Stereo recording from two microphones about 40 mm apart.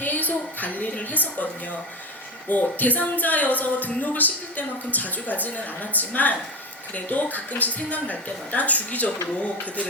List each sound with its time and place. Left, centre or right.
0.0 s speech: left
2.5 s a woman's voice: left